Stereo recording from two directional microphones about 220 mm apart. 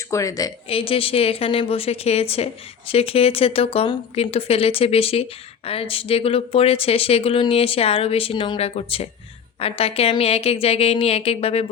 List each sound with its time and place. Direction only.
0.1 s speech: 15° left (ahead or behind)